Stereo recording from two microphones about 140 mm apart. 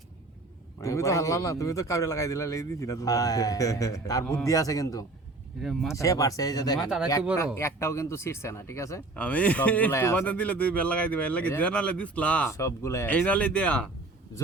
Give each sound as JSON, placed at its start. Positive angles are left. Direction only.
{"t": 0.8, "sound": "a man's voice", "side_deg": 20}
{"t": 5.6, "sound": "speech", "side_deg": 0}
{"t": 6.0, "sound": "a man's voice", "side_deg": 25}
{"t": 6.7, "sound": "speech", "side_deg": -5}
{"t": 7.3, "sound": "a man's voice", "side_deg": 20}
{"t": 9.1, "sound": "a man's voice", "side_deg": 10}
{"t": 12.5, "sound": "a man's voice", "side_deg": 20}
{"t": 13.1, "sound": "a man's voice", "side_deg": 10}